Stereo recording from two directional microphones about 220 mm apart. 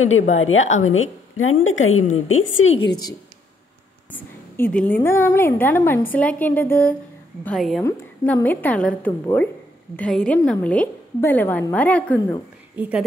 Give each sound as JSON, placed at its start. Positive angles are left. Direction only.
{"t": 0.0, "sound": "a woman's voice", "side_deg": 65}
{"t": 4.1, "sound": "a woman's voice", "side_deg": 10}
{"t": 12.7, "sound": "a woman's voice", "side_deg": -5}